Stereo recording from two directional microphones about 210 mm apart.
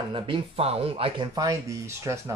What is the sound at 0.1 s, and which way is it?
Speech, 25° right (ahead or behind).